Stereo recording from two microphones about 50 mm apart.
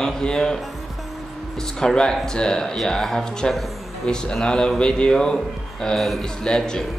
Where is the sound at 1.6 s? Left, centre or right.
Centre.